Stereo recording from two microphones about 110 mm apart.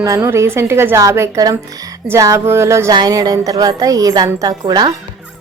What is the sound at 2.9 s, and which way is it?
A woman's voice, 35° right (ahead or behind).